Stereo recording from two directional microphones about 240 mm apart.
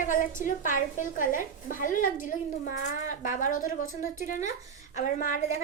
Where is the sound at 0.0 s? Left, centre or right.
Left.